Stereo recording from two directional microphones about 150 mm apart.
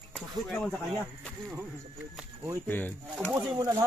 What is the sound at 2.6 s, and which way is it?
Speech, 10° left (ahead or behind).